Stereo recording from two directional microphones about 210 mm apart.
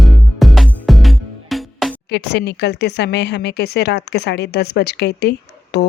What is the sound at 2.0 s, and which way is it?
Speech, 55° left (ahead or behind).